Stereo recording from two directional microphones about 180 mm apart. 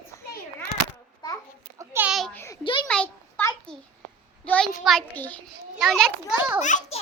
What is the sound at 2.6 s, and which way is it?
Speech, 25° left (ahead or behind).